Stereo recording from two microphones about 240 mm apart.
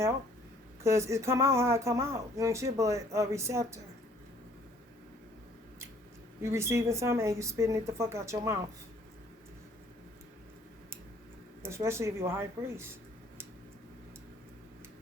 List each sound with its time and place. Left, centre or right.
0.9 s speech: centre
6.4 s speech: centre
11.6 s speech: centre